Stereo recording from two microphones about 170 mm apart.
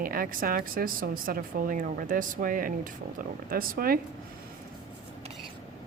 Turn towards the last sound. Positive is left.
turn(degrees=-60)  # may be behind; listen again after turning